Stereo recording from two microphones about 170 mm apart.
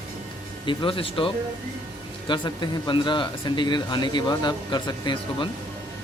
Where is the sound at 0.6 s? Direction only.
30° left (ahead or behind).